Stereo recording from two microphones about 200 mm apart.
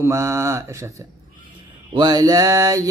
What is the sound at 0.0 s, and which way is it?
Mantra, 15° right (ahead or behind).